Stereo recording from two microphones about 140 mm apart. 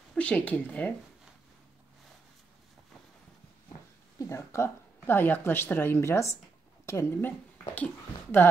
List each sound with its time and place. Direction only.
0.1 s speech: 10° left (ahead or behind)
4.2 s speech: 20° left (ahead or behind)